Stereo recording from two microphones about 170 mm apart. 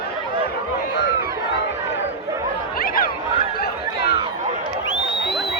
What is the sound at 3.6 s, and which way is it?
Chatter, 65° left (ahead or behind).